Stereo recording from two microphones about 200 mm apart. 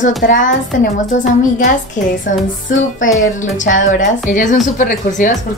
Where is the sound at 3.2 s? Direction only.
40° left (ahead or behind).